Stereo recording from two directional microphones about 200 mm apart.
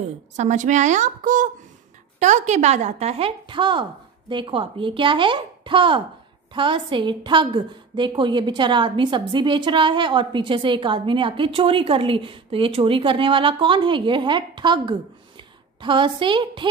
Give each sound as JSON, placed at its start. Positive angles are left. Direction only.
{"t": 0.4, "sound": "a woman's voice", "side_deg": -35}